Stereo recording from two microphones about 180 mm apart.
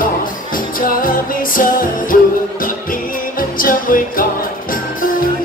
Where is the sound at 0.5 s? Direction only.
50° left (ahead or behind).